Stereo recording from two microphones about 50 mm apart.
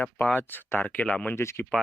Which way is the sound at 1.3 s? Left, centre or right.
Left.